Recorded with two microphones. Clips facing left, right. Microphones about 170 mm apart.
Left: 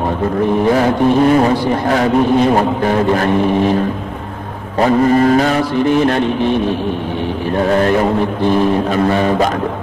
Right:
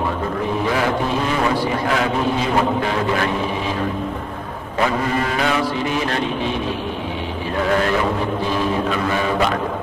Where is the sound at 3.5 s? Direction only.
60° left (ahead or behind).